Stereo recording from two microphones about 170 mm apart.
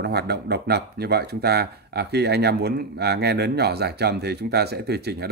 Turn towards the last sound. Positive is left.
turn(degrees=-75)  # may be behind; listen again after turning